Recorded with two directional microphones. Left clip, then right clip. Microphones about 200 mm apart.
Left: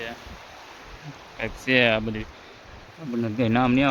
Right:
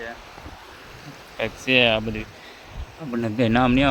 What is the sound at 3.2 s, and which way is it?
Speech, 10° right (ahead or behind).